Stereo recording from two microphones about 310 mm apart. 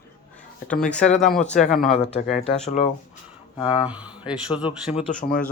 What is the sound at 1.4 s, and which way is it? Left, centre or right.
Speech, left.